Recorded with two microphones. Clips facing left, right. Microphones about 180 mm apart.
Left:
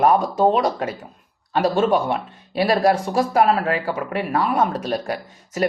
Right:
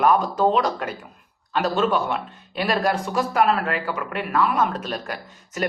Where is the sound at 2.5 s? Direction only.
30° left (ahead or behind).